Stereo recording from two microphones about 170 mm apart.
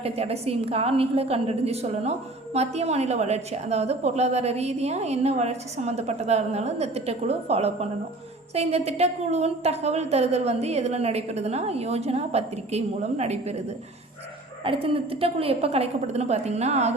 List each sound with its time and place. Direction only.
0.0 s a woman's voice: 35° right (ahead or behind)
14.6 s a woman's voice: 35° right (ahead or behind)